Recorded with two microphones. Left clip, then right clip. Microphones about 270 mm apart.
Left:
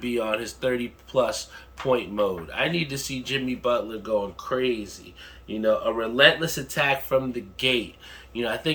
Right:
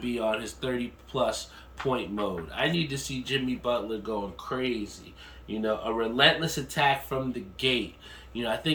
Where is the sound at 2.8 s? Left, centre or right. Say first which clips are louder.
Left 2 dB; centre.